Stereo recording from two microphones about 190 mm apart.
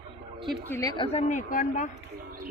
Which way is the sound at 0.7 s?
20° left (ahead or behind).